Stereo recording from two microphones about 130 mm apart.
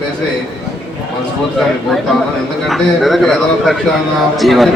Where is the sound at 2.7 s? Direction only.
Centre (ahead or behind).